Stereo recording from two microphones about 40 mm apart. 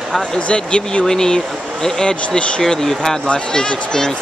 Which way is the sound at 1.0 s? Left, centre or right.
Centre.